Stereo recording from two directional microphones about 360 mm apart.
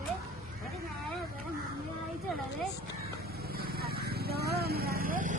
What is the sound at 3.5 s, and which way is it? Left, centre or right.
Vehicle, right.